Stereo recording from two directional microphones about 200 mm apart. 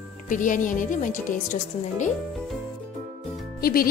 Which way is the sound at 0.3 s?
40° left (ahead or behind).